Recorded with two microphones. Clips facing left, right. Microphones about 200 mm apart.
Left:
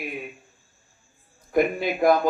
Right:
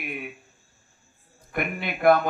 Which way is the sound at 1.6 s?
60° right (ahead or behind).